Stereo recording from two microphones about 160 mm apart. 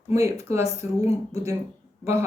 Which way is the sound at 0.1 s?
20° right (ahead or behind).